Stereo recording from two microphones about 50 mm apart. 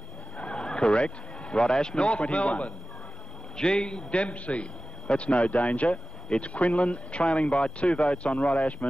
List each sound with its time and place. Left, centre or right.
0.4 s speech: centre